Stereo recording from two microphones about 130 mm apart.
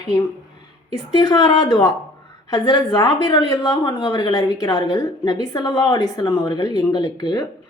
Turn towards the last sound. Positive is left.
turn(degrees=30)  # may be behind; listen again after turning